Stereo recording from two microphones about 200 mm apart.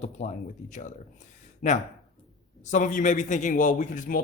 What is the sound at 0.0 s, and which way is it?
Speech, 35° left (ahead or behind).